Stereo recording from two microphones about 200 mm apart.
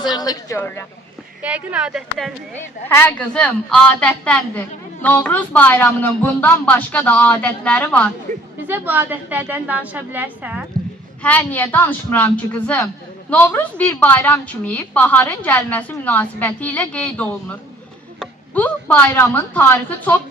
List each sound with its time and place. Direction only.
0.0 s a woman's voice: 20° left (ahead or behind)
1.4 s speech: 5° right (ahead or behind)
2.9 s a woman's voice: 10° left (ahead or behind)
8.6 s a woman's voice: 10° right (ahead or behind)
11.2 s a woman's voice: 10° left (ahead or behind)